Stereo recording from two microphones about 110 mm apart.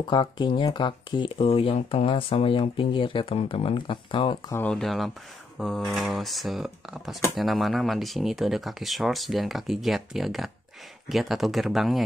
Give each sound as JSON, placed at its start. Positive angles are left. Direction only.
{"t": 0.0, "sound": "speech", "side_deg": 45}
{"t": 3.3, "sound": "speech", "side_deg": 60}
{"t": 4.7, "sound": "speech", "side_deg": 0}